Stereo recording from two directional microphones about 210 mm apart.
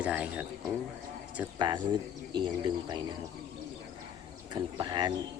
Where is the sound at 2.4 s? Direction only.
20° right (ahead or behind).